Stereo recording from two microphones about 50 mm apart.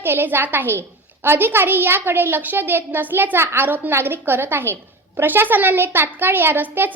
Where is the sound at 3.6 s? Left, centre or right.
Right.